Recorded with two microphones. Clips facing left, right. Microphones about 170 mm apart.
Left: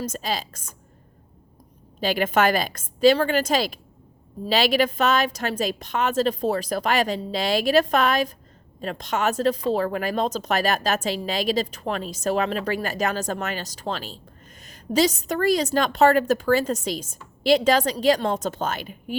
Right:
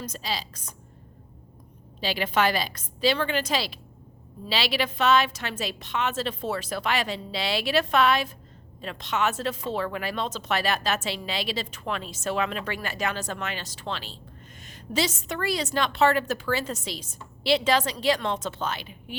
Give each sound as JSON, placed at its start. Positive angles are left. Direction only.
{"t": 0.0, "sound": "a woman's voice", "side_deg": 45}
{"t": 2.0, "sound": "a woman's voice", "side_deg": 50}